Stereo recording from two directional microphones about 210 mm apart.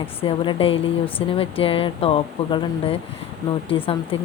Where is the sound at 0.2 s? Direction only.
25° left (ahead or behind).